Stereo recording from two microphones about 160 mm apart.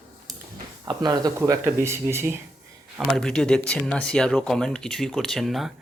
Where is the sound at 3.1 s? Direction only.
5° left (ahead or behind).